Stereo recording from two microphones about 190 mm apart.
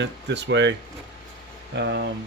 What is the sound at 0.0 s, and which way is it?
Speech, 65° right (ahead or behind).